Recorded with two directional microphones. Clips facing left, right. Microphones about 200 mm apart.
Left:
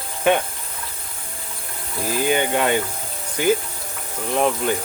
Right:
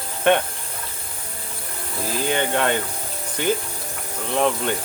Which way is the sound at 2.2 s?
10° left (ahead or behind).